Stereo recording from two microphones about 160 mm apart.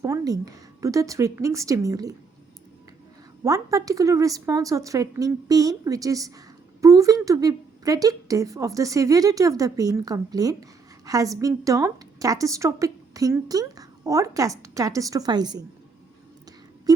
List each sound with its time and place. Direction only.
0.0 s a woman's voice: 20° right (ahead or behind)
3.4 s a woman's voice: 20° right (ahead or behind)